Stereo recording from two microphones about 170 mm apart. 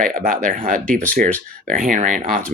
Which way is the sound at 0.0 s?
55° right (ahead or behind).